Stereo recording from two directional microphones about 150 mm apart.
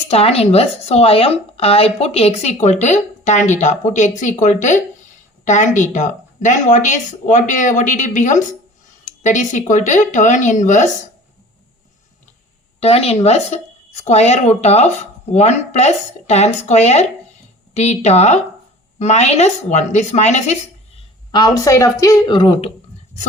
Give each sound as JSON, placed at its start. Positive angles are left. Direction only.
{"t": 0.1, "sound": "speech", "side_deg": 40}
{"t": 12.8, "sound": "speech", "side_deg": 40}
{"t": 21.3, "sound": "speech", "side_deg": 25}